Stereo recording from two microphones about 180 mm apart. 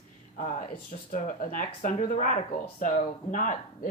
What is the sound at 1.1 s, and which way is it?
Speech, 45° left (ahead or behind).